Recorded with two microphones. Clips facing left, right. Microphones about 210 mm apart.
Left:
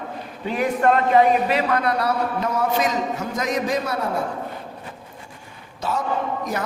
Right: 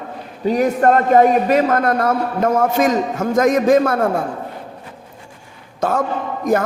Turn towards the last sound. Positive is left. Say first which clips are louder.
# right 7 dB
turn(degrees=-50)  # may be behind; listen again after turning